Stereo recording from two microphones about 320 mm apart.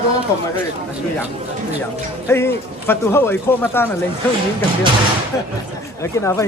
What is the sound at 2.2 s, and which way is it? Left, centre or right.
Speech, centre.